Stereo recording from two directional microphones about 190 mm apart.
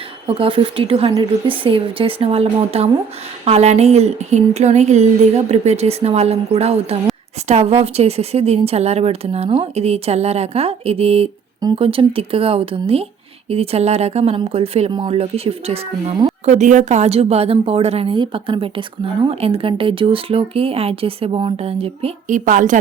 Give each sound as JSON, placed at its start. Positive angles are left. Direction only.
{"t": 0.3, "sound": "a woman's voice", "side_deg": -30}